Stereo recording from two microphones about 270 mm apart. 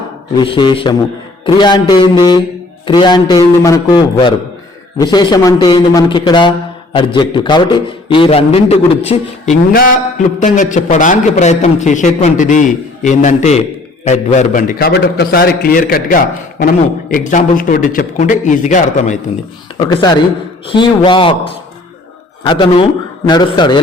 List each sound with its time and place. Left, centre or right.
0.3 s a man's voice: centre
19.7 s a man's voice: centre